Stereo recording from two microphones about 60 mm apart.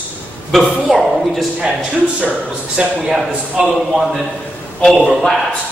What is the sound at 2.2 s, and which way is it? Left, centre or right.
Speech, centre.